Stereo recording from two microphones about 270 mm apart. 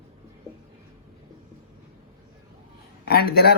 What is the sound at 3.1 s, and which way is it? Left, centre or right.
Speech, left.